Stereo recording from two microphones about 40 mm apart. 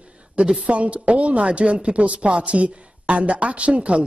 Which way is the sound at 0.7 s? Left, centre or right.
Right.